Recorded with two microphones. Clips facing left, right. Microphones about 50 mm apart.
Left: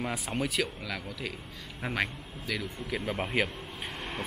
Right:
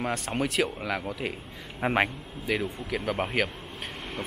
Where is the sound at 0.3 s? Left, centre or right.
Centre.